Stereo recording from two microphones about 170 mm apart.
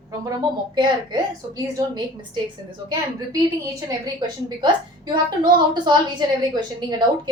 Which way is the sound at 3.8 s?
25° right (ahead or behind).